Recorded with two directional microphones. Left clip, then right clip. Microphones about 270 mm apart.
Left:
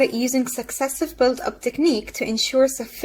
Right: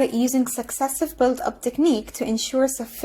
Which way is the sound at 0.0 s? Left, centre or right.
Right.